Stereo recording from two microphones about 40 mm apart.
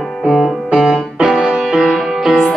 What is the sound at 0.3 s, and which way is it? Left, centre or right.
Music, centre.